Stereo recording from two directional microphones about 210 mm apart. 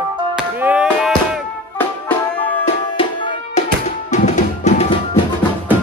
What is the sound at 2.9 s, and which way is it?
Music, 25° left (ahead or behind).